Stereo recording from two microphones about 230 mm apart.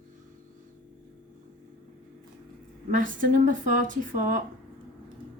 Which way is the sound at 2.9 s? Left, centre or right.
Right.